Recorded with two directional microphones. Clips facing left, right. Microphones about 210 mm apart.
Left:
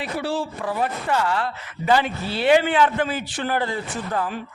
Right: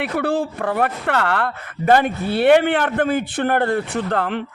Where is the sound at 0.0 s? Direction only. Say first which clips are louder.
Right 5 dB; 55° right (ahead or behind).